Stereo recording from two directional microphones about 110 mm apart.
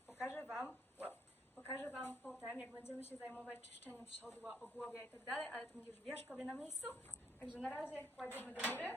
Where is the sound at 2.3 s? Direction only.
5° right (ahead or behind).